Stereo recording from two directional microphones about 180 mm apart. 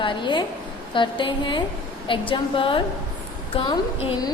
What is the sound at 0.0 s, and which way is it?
A woman's voice, 25° left (ahead or behind).